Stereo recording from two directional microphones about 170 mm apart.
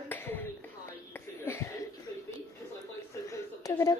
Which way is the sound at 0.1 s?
10° left (ahead or behind).